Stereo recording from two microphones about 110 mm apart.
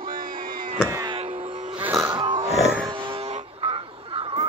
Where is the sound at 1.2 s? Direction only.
65° right (ahead or behind); by 1.7 s 85° right.